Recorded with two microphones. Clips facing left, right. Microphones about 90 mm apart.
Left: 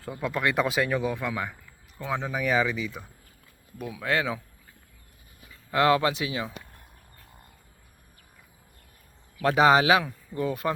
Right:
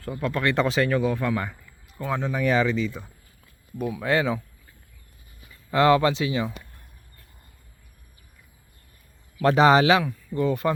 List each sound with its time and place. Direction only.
0.0 s a man's voice: 15° left (ahead or behind); by 4.4 s centre (ahead or behind)
5.7 s a man's voice: 5° left (ahead or behind)
9.4 s a man's voice: centre (ahead or behind)